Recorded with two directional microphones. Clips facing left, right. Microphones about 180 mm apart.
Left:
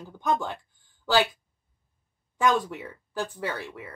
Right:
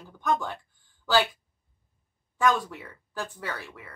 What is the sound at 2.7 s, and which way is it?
Speech, 20° left (ahead or behind).